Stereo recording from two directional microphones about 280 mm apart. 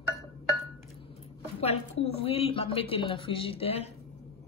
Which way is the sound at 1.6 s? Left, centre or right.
Left.